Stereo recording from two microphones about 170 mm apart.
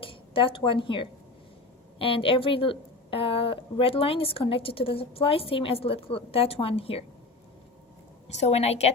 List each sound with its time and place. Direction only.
0.0 s a woman's voice: 30° left (ahead or behind)
8.3 s a woman's voice: 40° left (ahead or behind)